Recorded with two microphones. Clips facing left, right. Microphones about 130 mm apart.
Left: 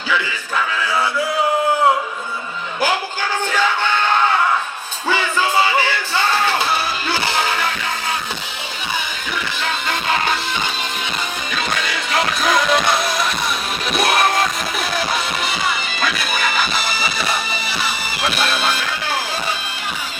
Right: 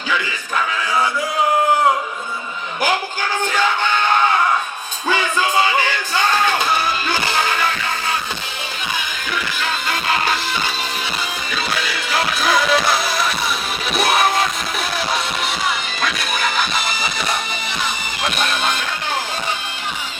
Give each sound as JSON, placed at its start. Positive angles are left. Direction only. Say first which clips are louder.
{"t": 5.0, "sound": "music", "louder": "even", "side_deg": -15}
{"t": 9.9, "sound": "music", "louder": "even", "side_deg": -5}
{"t": 11.5, "sound": "music", "louder": "left 1 dB", "side_deg": 0}
{"t": 15.4, "sound": "music", "louder": "even", "side_deg": 0}